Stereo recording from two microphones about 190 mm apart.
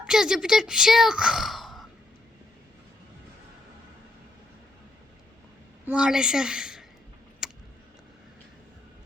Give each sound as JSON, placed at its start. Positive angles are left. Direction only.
{"t": 0.0, "sound": "speech", "side_deg": -5}
{"t": 5.8, "sound": "a woman's voice", "side_deg": -5}
{"t": 7.4, "sound": "a sound", "side_deg": 0}